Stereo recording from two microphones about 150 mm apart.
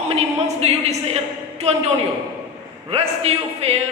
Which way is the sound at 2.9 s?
40° right (ahead or behind).